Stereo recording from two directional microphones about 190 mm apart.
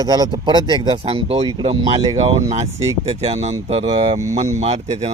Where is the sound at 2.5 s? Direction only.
35° right (ahead or behind).